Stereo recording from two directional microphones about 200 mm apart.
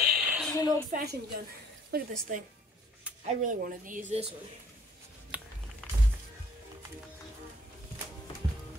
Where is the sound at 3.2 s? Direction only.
40° right (ahead or behind).